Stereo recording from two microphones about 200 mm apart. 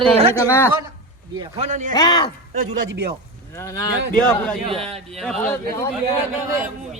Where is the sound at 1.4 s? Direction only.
30° right (ahead or behind).